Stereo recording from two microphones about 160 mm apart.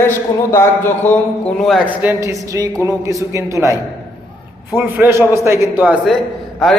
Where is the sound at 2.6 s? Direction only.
20° right (ahead or behind).